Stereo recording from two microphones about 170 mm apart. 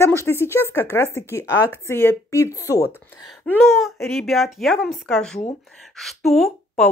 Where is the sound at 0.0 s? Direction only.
15° left (ahead or behind).